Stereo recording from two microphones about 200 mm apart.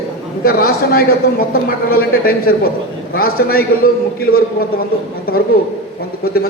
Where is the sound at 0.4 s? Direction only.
50° left (ahead or behind).